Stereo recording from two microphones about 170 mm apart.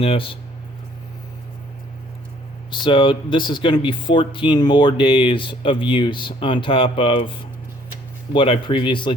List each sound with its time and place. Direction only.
0.0 s speech: 30° left (ahead or behind)
2.6 s speech: 25° left (ahead or behind)